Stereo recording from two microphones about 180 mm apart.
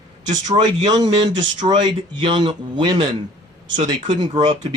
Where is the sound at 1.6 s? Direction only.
35° right (ahead or behind).